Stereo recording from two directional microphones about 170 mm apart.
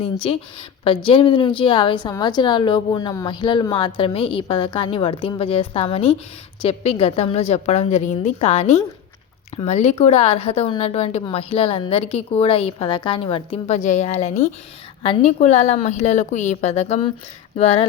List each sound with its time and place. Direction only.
0.0 s a woman's voice: 35° left (ahead or behind)